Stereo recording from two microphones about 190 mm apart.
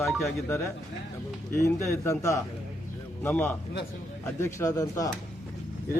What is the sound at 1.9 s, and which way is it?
A man's voice, 15° left (ahead or behind).